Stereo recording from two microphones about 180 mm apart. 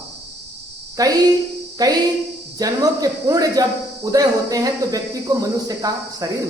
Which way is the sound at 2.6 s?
20° right (ahead or behind).